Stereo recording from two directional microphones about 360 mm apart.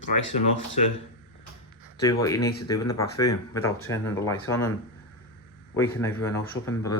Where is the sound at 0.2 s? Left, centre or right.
Left.